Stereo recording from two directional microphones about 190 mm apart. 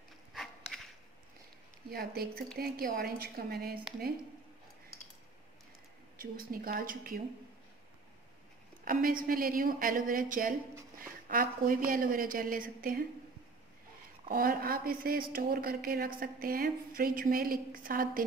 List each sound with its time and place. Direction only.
1.9 s a woman's voice: 55° right (ahead or behind)
6.1 s a woman's voice: 50° right (ahead or behind)
8.8 s a woman's voice: 50° right (ahead or behind)
14.3 s a woman's voice: 50° right (ahead or behind)